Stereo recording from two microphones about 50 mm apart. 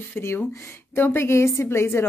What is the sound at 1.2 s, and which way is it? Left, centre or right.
Speech, left.